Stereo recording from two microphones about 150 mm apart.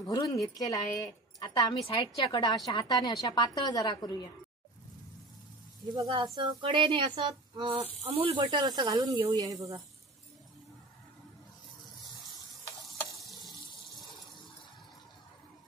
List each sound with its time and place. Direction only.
0.0 s a woman's voice: 25° left (ahead or behind)
5.9 s speech: 30° right (ahead or behind)
13.0 s stir: centre (ahead or behind)